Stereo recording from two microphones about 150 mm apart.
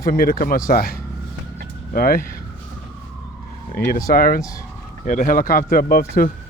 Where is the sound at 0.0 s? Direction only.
75° left (ahead or behind).